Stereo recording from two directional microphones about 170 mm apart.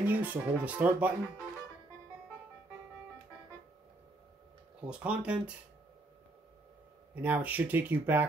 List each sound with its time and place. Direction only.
0.0 s speech: 10° right (ahead or behind)
4.8 s speech: 5° right (ahead or behind)
7.2 s speech: 10° right (ahead or behind)